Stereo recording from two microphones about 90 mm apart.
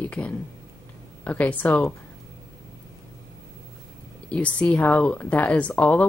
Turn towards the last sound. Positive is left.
turn(degrees=15)  # may be behind; listen again after turning